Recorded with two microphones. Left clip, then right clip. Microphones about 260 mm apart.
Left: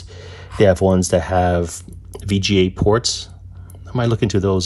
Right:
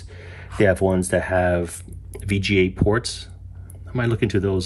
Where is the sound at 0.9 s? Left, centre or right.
Right.